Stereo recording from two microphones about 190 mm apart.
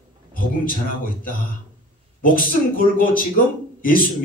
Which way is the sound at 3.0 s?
45° left (ahead or behind).